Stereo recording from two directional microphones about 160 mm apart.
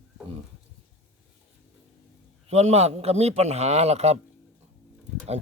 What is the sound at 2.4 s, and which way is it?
A man's voice, 40° right (ahead or behind).